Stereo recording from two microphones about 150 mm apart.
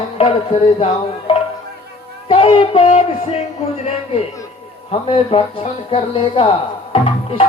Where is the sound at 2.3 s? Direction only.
35° left (ahead or behind).